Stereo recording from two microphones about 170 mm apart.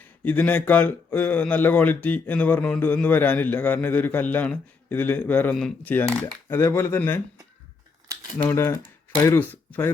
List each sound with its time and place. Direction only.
0.3 s speech: 10° left (ahead or behind)
8.4 s speech: 15° left (ahead or behind)